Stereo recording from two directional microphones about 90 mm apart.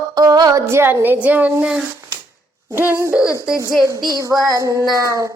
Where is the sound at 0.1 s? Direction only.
50° right (ahead or behind).